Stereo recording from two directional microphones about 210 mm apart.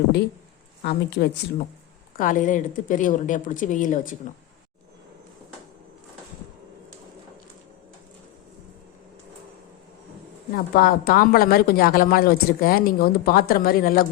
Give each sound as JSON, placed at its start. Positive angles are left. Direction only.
{"t": 0.8, "sound": "a woman's voice", "side_deg": 50}
{"t": 2.1, "sound": "a woman's voice", "side_deg": 40}
{"t": 10.5, "sound": "a woman's voice", "side_deg": 45}